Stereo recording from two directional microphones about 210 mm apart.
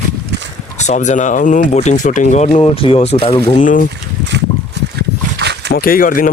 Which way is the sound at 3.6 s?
40° left (ahead or behind).